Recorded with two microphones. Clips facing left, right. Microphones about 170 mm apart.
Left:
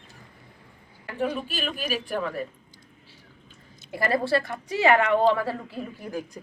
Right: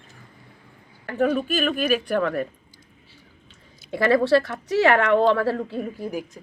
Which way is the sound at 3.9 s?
90° right.